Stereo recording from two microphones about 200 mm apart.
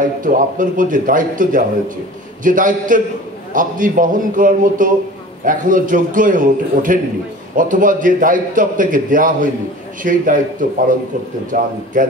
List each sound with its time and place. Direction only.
0.0 s a man's voice: 40° right (ahead or behind)